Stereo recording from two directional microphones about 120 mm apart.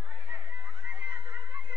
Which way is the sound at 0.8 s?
15° right (ahead or behind).